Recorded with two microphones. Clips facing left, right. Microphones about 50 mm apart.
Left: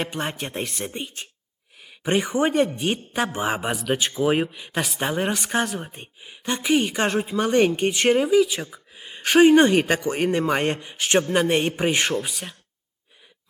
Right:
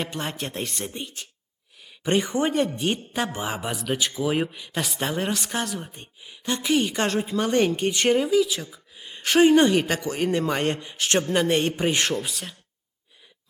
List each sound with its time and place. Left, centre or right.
0.1 s speech: centre
0.9 s speech: left
2.0 s speech: centre
3.3 s speech: left
4.8 s speech: centre